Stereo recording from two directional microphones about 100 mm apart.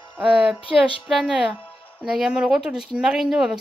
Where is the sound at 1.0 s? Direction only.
10° right (ahead or behind).